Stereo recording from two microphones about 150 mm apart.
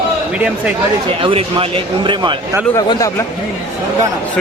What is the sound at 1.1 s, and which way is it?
Speech, 40° right (ahead or behind).